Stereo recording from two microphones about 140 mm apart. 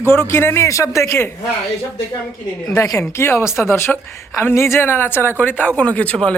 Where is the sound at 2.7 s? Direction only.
25° left (ahead or behind).